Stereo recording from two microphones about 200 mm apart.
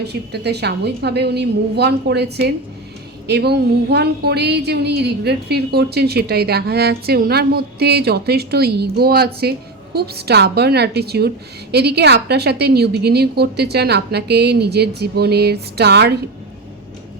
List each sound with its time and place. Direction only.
0.0 s a woman's voice: 55° right (ahead or behind)